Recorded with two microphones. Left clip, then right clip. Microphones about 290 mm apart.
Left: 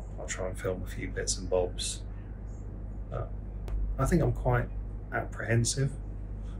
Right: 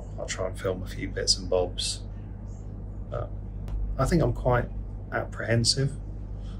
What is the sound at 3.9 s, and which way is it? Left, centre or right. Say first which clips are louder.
Speech: right 4 dB; centre.